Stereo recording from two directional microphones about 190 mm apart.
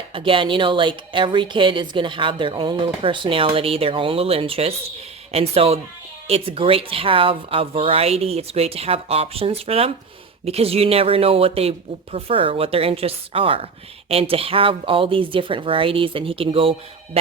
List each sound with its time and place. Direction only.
0.1 s a woman's voice: 25° right (ahead or behind)